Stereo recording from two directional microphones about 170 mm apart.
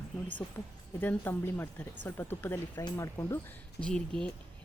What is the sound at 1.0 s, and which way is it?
Speech, 10° left (ahead or behind).